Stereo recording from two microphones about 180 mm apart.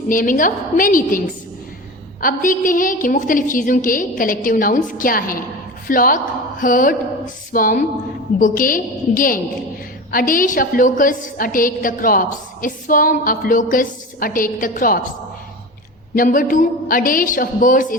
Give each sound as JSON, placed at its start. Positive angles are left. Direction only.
{"t": 0.1, "sound": "a woman's voice", "side_deg": 50}
{"t": 2.2, "sound": "a woman's voice", "side_deg": 50}
{"t": 16.1, "sound": "a woman's voice", "side_deg": 50}